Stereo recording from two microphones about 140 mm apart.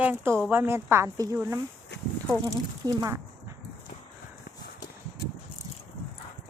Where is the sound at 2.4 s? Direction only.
25° right (ahead or behind).